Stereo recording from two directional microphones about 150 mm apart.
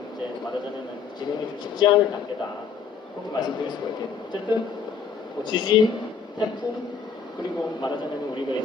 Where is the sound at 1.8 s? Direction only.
30° left (ahead or behind).